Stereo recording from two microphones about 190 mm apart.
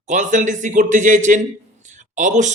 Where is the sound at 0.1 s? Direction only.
40° right (ahead or behind).